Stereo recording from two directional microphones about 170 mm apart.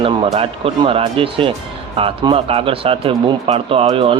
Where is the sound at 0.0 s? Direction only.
30° right (ahead or behind).